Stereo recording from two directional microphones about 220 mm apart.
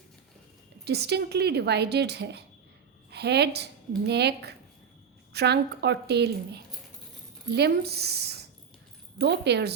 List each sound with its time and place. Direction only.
0.9 s a woman's voice: 50° right (ahead or behind)